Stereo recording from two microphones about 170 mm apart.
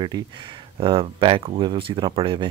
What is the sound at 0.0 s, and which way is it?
Speech, 30° right (ahead or behind).